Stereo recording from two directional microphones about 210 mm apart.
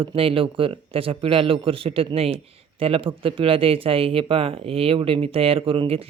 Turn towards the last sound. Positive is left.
turn(degrees=-25)  # may be behind; listen again after turning